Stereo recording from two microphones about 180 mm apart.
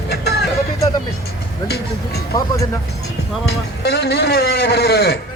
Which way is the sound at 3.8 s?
65° left (ahead or behind).